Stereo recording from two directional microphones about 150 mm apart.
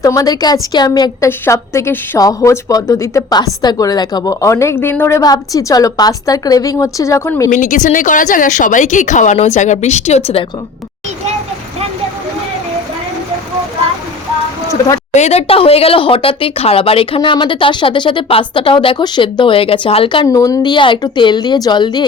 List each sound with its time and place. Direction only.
0.0 s a woman's voice: 25° left (ahead or behind)
7.5 s speech: 60° left (ahead or behind)
15.1 s speech: 45° left (ahead or behind)
20.2 s a woman's voice: 20° left (ahead or behind)